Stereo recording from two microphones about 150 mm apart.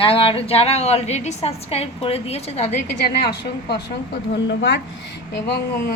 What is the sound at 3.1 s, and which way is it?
Speech, 90° left.